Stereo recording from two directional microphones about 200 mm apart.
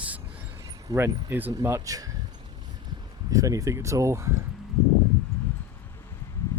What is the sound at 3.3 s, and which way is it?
Speech, 15° right (ahead or behind).